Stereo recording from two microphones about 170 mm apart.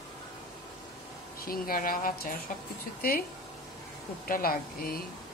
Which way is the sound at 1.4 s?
60° left (ahead or behind).